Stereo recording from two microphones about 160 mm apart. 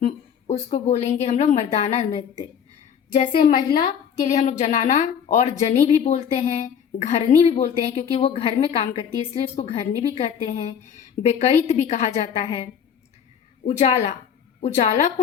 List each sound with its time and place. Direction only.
0.0 s a sound: 40° left (ahead or behind)
0.7 s a woman's voice: 45° left (ahead or behind)
4.2 s a woman's voice: 50° left (ahead or behind)
13.7 s a woman's voice: 45° left (ahead or behind)